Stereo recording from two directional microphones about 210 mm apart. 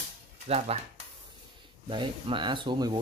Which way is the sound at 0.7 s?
30° right (ahead or behind).